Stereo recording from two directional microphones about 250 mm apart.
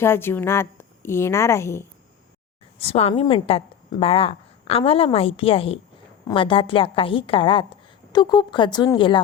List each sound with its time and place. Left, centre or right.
0.0 s a woman's voice: centre
2.7 s a woman's voice: left